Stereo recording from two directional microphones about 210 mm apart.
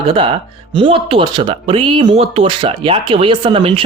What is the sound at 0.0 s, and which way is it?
Speech, 25° right (ahead or behind).